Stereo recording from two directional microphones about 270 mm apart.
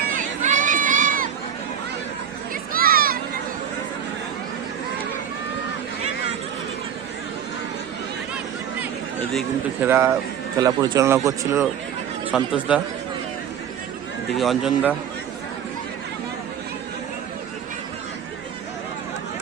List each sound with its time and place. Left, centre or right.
0.2 s run: right
2.7 s a sound: right
9.8 s a man's voice: centre
14.3 s a man's voice: centre